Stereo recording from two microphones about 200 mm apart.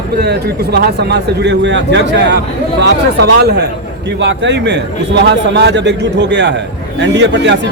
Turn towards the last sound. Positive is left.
turn(degrees=-60)  # may be behind; listen again after turning